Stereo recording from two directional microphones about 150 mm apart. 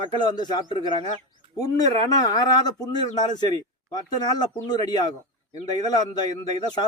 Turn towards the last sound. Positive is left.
turn(degrees=25)  # may be behind; listen again after turning